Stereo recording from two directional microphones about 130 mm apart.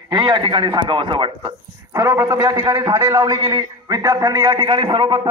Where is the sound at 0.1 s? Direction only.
40° right (ahead or behind).